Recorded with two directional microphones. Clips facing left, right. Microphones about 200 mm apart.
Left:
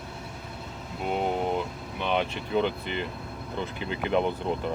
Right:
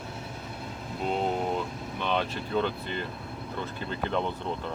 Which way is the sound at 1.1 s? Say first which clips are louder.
Left 1 dB; 15° left (ahead or behind).